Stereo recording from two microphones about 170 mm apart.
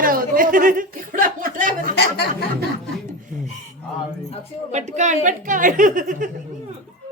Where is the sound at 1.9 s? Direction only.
75° left (ahead or behind).